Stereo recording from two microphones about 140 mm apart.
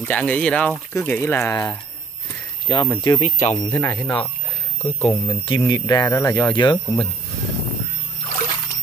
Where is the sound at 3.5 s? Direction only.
25° left (ahead or behind).